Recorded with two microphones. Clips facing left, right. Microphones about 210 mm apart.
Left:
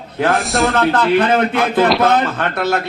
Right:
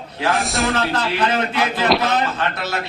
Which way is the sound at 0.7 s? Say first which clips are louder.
Left 7 dB; 55° left (ahead or behind).